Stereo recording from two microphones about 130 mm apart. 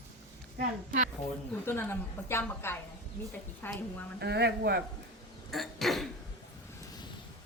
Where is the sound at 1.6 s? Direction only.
15° left (ahead or behind).